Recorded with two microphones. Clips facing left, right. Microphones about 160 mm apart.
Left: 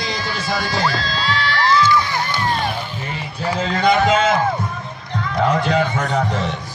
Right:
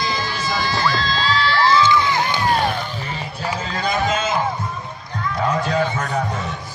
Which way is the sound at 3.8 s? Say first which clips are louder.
Left 6 dB; 70° left (ahead or behind).